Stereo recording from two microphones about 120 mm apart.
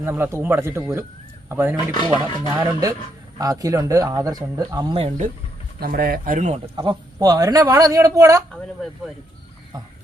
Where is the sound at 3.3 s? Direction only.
30° right (ahead or behind).